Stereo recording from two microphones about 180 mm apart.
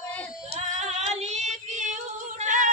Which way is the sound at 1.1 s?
40° right (ahead or behind).